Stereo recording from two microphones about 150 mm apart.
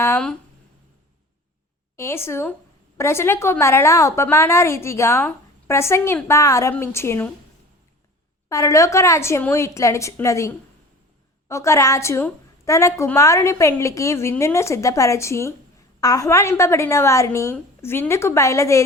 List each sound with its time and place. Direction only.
2.0 s a woman's voice: 15° left (ahead or behind)
8.4 s a woman's voice: 20° left (ahead or behind)